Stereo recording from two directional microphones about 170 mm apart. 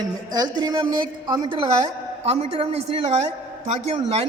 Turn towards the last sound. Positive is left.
turn(degrees=-35)  # may be behind; listen again after turning